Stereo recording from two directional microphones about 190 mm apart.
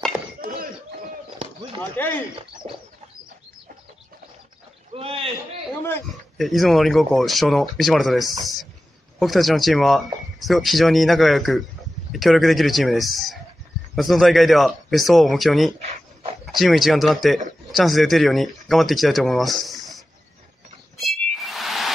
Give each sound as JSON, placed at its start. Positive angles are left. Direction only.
{"t": 0.4, "sound": "a sound", "side_deg": -55}
{"t": 1.4, "sound": "a sound", "side_deg": -25}
{"t": 1.8, "sound": "speech", "side_deg": 10}
{"t": 2.6, "sound": "bird", "side_deg": -35}
{"t": 4.9, "sound": "a man's voice", "side_deg": -30}
{"t": 6.3, "sound": "speech", "side_deg": 0}
{"t": 21.0, "sound": "music", "side_deg": 0}